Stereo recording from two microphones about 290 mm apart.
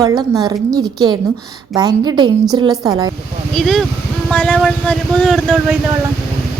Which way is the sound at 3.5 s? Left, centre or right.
Centre.